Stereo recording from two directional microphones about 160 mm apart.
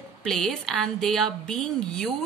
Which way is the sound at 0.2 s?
5° left (ahead or behind).